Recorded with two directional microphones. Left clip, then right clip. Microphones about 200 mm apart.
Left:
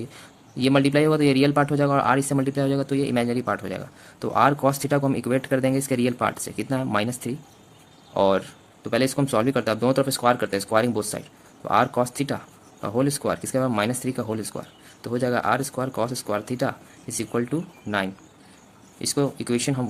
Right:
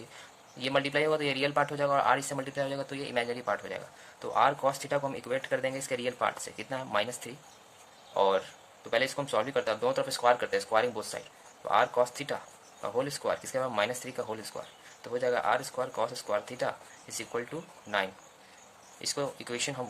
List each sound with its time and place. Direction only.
0.6 s speech: 35° left (ahead or behind)